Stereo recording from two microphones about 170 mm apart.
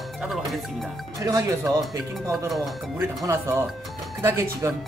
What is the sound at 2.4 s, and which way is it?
Speech, centre (ahead or behind).